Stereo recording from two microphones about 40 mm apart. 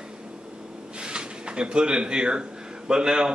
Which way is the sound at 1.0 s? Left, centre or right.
Right.